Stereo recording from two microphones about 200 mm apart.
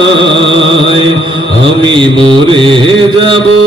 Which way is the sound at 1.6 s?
25° right (ahead or behind).